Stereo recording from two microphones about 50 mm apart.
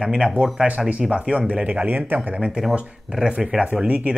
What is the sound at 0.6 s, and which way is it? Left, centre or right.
Speech, right.